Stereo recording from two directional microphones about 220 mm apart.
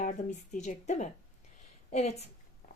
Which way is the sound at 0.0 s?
35° left (ahead or behind).